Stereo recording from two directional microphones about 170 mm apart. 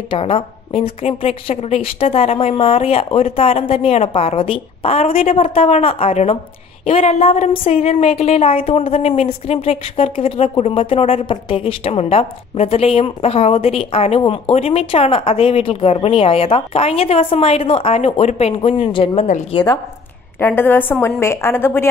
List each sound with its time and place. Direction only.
0.1 s a woman's voice: 30° left (ahead or behind)
20.3 s a woman's voice: 10° left (ahead or behind)